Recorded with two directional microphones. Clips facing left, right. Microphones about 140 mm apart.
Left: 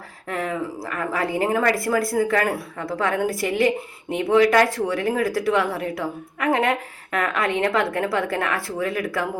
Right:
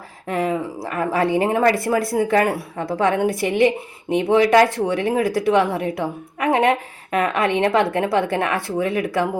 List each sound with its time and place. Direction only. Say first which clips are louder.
0.3 s speech: right 4 dB; 25° right (ahead or behind)